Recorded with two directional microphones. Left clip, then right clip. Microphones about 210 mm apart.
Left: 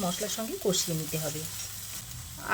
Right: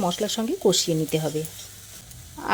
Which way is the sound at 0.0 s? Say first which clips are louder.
Right 7 dB; 40° right (ahead or behind).